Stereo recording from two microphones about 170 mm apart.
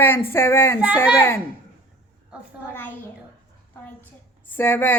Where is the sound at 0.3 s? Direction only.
15° left (ahead or behind).